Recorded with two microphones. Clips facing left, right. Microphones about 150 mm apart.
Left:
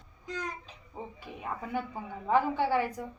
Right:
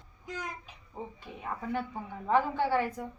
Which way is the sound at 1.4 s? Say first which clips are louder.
Even; 10° left (ahead or behind).